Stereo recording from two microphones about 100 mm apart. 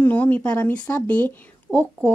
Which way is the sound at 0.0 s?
15° left (ahead or behind).